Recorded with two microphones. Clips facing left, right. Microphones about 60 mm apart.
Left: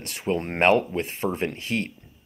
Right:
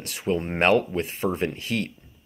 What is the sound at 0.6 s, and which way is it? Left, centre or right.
Speech, left.